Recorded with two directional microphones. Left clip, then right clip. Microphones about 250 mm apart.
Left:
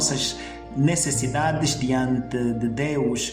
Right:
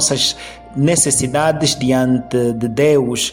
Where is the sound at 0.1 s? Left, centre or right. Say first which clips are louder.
Right 9 dB; right.